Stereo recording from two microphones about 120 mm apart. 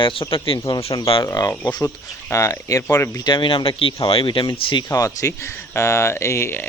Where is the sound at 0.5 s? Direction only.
35° left (ahead or behind).